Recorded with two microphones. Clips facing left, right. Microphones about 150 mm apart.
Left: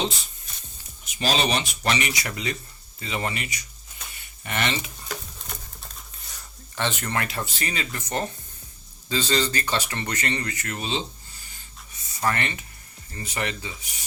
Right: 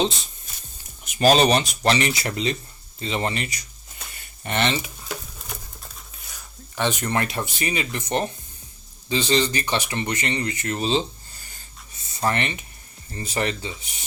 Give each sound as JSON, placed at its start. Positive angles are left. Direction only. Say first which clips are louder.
{"t": 1.0, "sound": "speech", "louder": "right 8 dB", "side_deg": -50}
{"t": 6.7, "sound": "speech", "louder": "right 4 dB", "side_deg": -15}
{"t": 12.0, "sound": "speech", "louder": "right 2 dB", "side_deg": -25}